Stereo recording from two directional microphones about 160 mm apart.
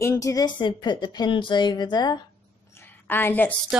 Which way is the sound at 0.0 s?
20° left (ahead or behind).